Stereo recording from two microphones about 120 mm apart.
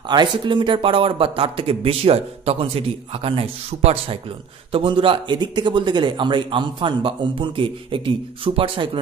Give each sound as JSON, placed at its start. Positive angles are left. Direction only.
{"t": 0.1, "sound": "a man's voice", "side_deg": -40}